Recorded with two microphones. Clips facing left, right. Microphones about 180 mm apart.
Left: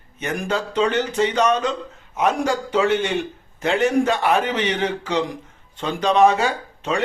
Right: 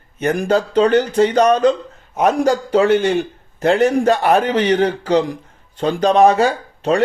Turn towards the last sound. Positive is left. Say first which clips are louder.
# right 7 dB
turn(degrees=-40)  # may be behind; listen again after turning